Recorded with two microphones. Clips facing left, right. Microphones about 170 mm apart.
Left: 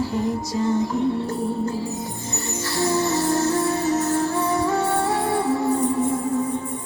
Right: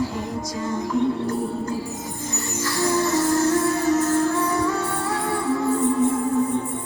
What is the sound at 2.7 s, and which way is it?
Music, 25° left (ahead or behind).